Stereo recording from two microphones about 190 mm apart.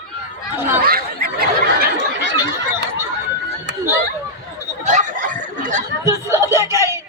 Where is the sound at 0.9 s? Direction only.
50° right (ahead or behind).